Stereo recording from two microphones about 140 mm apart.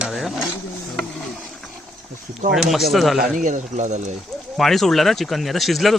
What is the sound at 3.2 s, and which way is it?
Speech, 70° right (ahead or behind).